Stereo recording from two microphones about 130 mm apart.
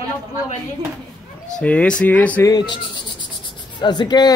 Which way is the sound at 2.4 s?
35° left (ahead or behind).